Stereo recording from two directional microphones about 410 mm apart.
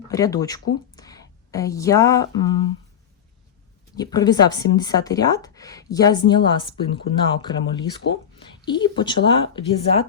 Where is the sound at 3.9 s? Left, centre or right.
Centre.